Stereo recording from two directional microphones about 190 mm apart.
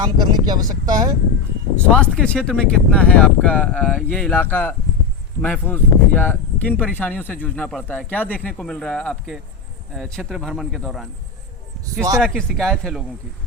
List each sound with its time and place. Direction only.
0.0 s speech: 20° right (ahead or behind)
1.7 s speech: 5° left (ahead or behind)
12.2 s speech: 5° left (ahead or behind)